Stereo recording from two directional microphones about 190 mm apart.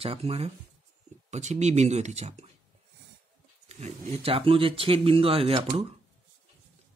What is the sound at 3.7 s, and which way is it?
Speech, 35° right (ahead or behind).